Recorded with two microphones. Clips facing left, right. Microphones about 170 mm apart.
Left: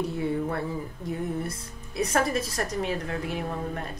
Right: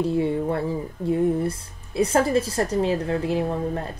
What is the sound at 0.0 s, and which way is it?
Speech, 30° right (ahead or behind).